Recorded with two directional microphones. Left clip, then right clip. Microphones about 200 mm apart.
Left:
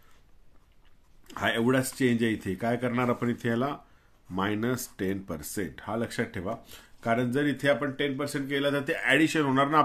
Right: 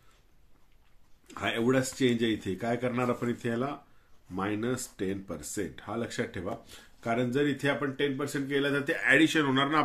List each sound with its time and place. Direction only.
1.3 s speech: 35° left (ahead or behind)